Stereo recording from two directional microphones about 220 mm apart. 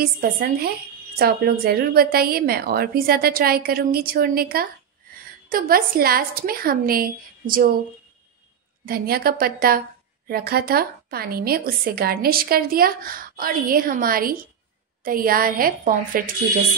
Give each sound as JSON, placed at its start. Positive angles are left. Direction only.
{"t": 0.0, "sound": "a woman's voice", "side_deg": -45}
{"t": 8.8, "sound": "a woman's voice", "side_deg": -45}